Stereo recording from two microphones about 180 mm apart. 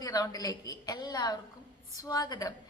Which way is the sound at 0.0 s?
20° left (ahead or behind).